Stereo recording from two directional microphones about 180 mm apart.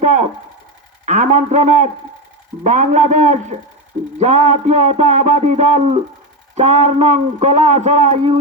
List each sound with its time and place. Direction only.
0.0 s a man's voice: 40° right (ahead or behind)